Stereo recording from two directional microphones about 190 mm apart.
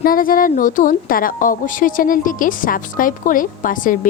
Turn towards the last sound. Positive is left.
turn(degrees=45)  # may be behind; listen again after turning